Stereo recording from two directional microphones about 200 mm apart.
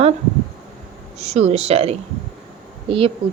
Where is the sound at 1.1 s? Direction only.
35° right (ahead or behind).